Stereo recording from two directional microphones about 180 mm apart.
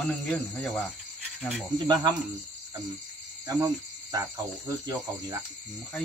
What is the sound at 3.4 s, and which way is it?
Cricket, 20° right (ahead or behind).